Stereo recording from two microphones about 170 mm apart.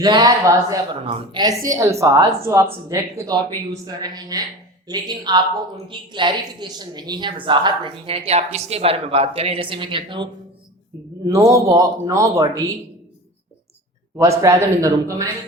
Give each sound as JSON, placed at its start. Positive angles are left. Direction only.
{"t": 0.0, "sound": "a woman's voice", "side_deg": -25}
{"t": 3.7, "sound": "a woman's voice", "side_deg": -25}
{"t": 11.3, "sound": "a woman's voice", "side_deg": -20}
{"t": 14.2, "sound": "a woman's voice", "side_deg": -20}